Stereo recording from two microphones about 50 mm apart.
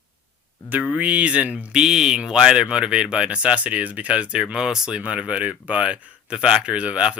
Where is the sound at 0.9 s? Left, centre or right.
Right.